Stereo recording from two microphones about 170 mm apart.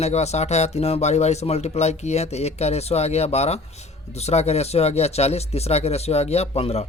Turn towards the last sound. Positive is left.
turn(degrees=35)  # may be behind; listen again after turning